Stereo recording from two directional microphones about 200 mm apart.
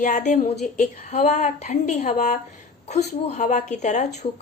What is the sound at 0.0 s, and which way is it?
A woman's voice, 35° left (ahead or behind).